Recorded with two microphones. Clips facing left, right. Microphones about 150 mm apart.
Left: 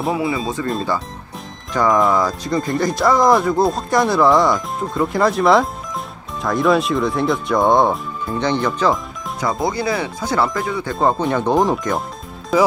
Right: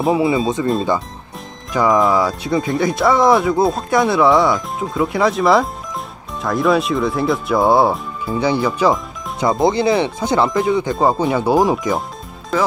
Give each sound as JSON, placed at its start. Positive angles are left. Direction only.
{"t": 0.1, "sound": "speech", "side_deg": -25}
{"t": 1.7, "sound": "speech", "side_deg": -5}
{"t": 9.4, "sound": "speech", "side_deg": -25}